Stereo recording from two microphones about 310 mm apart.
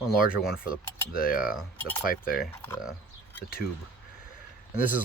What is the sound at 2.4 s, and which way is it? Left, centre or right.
Speech, centre.